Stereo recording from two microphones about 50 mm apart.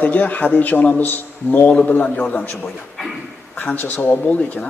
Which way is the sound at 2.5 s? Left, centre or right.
Centre.